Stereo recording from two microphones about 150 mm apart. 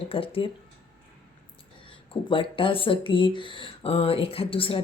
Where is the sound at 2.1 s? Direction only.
35° left (ahead or behind).